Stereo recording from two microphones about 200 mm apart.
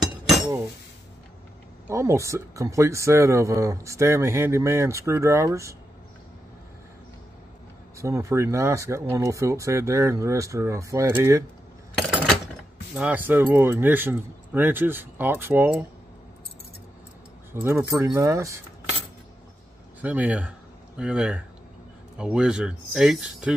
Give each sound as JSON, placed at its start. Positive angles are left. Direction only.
{"t": 1.9, "sound": "speech", "side_deg": -15}
{"t": 8.0, "sound": "speech", "side_deg": -15}
{"t": 12.9, "sound": "speech", "side_deg": -10}
{"t": 17.5, "sound": "speech", "side_deg": -10}
{"t": 20.0, "sound": "speech", "side_deg": -5}